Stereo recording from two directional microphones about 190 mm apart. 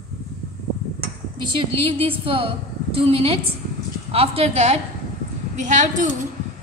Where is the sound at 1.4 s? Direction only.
25° right (ahead or behind).